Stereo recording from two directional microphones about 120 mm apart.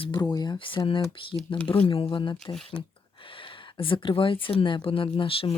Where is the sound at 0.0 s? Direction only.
40° left (ahead or behind).